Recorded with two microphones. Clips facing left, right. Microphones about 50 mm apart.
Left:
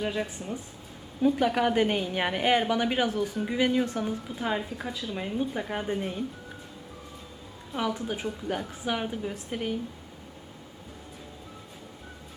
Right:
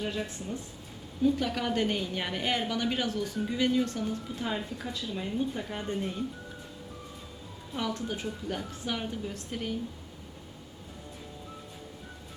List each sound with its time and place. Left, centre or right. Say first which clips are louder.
0.0 s a woman's voice: left 3 dB; centre
5.1 s a woman's voice: left 2 dB; centre
7.7 s a woman's voice: left 3 dB; centre